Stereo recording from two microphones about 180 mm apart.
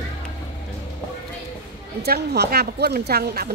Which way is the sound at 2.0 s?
60° right (ahead or behind).